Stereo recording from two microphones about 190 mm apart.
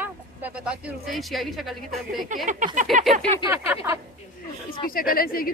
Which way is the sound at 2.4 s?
40° right (ahead or behind).